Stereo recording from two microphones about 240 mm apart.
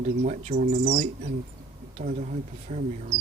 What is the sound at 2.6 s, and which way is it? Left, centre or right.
Speech, right.